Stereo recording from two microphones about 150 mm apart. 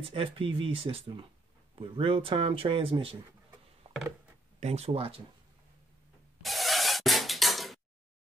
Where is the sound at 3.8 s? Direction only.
45° right (ahead or behind).